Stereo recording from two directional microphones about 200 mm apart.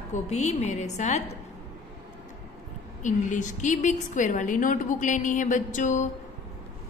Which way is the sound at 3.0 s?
40° left (ahead or behind).